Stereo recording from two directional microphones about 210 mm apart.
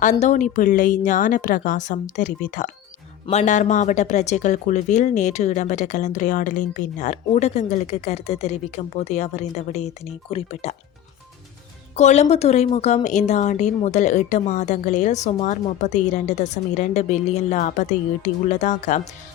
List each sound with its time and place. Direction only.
0.0 s a woman's voice: 35° left (ahead or behind)
11.9 s a woman's voice: 35° left (ahead or behind)